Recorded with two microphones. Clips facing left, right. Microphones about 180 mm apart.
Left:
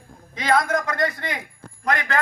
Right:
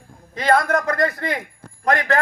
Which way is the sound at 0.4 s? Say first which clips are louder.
Right 3 dB; 55° right (ahead or behind).